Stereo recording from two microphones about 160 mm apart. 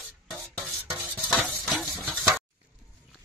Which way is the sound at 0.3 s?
Centre (ahead or behind).